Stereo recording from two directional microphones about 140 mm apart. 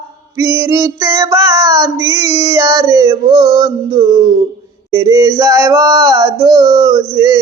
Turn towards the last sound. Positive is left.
turn(degrees=-30)  # may be behind; listen again after turning